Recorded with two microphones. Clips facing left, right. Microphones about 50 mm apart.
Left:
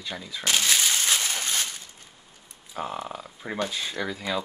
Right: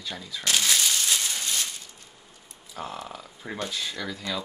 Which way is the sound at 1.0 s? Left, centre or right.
Left.